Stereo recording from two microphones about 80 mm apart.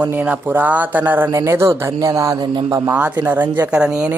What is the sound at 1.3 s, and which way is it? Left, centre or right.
Speech, right.